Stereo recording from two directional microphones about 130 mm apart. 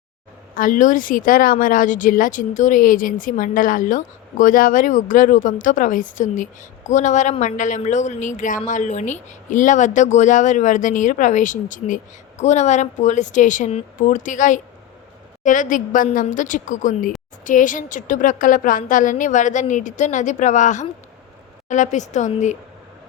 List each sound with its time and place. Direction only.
0.5 s a woman's voice: 90° left; by 11.9 s 75° left (ahead or behind)
12.4 s a woman's voice: 60° left (ahead or behind); by 13.7 s 75° left (ahead or behind)
13.7 s a woman's voice: 60° left (ahead or behind); by 16.0 s 90° left
16.2 s a woman's voice: 80° left